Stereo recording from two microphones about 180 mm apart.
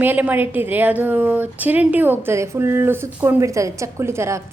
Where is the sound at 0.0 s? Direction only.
10° right (ahead or behind).